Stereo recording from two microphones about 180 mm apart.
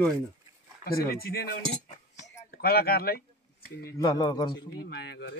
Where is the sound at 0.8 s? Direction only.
55° left (ahead or behind).